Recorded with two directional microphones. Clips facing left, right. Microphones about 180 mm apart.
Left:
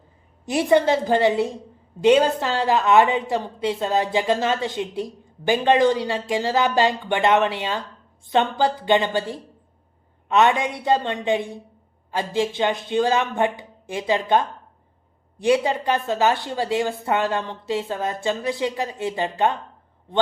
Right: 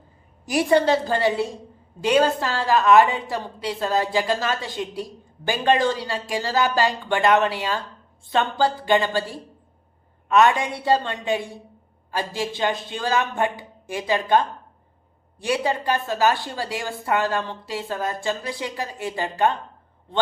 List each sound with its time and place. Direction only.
0.4 s a woman's voice: 20° left (ahead or behind)